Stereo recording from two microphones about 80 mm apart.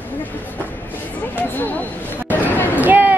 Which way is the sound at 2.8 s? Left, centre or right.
Right.